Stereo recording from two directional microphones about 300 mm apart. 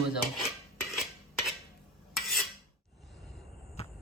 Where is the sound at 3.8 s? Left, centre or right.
Left.